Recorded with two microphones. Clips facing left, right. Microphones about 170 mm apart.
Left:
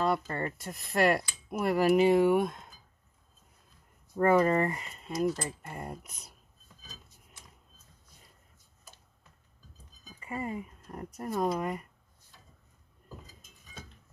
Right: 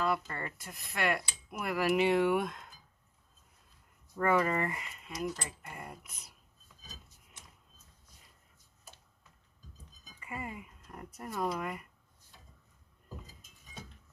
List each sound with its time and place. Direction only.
0.0 s speech: 30° left (ahead or behind)
4.2 s speech: 30° left (ahead or behind)
10.2 s speech: 30° left (ahead or behind)